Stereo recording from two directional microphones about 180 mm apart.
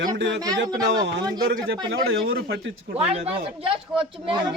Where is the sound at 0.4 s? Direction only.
20° right (ahead or behind).